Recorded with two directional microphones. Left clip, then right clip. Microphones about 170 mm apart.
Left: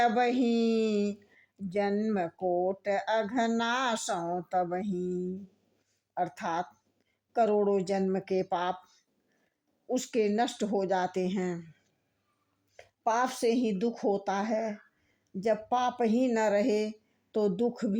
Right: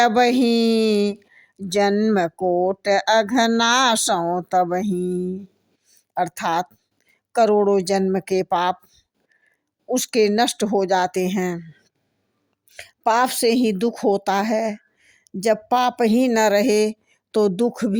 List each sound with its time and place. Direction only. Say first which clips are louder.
0.0 s speech: right 10 dB; 35° right (ahead or behind)